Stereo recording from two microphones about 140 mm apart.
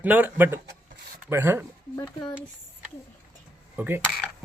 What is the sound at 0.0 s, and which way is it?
Speech, 10° right (ahead or behind).